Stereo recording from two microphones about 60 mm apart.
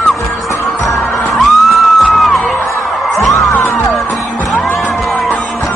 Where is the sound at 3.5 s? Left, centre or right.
Left.